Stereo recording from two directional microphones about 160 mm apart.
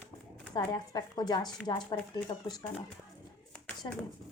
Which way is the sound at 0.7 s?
25° left (ahead or behind).